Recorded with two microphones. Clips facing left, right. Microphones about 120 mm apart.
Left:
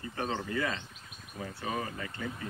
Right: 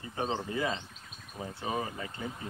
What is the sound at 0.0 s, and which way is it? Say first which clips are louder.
Speech: right 1 dB; 20° right (ahead or behind).